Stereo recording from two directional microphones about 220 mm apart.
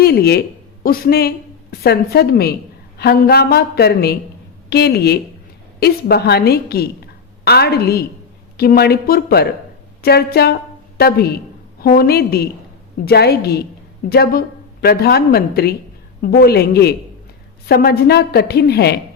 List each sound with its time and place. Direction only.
0.0 s a woman's voice: 45° left (ahead or behind)